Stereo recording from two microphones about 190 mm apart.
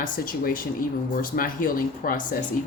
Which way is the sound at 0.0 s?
45° left (ahead or behind).